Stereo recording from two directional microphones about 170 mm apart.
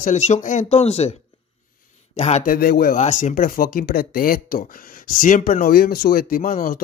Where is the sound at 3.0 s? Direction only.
45° left (ahead or behind).